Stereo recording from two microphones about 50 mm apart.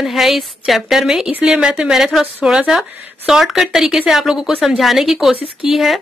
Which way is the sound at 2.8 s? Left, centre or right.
Centre.